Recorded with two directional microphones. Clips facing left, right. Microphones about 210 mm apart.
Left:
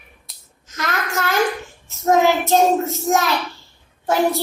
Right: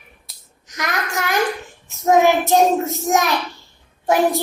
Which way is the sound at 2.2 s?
15° right (ahead or behind).